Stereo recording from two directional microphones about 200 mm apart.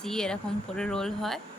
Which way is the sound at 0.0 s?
5° left (ahead or behind).